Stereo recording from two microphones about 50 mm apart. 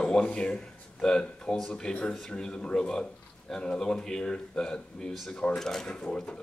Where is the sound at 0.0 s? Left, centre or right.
Centre.